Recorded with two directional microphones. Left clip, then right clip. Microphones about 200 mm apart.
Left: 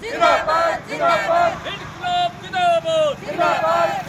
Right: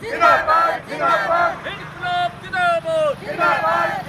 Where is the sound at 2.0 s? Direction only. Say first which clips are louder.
Left 1 dB; 5° left (ahead or behind).